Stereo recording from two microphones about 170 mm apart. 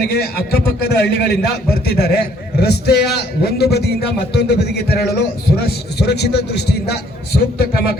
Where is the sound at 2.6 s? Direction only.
75° left (ahead or behind).